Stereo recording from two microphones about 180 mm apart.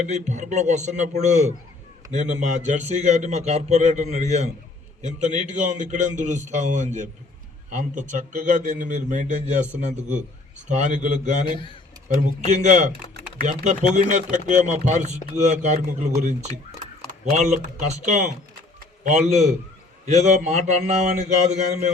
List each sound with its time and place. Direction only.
0.1 s a man's voice: 40° right (ahead or behind)
17.6 s a man's voice: 45° right (ahead or behind)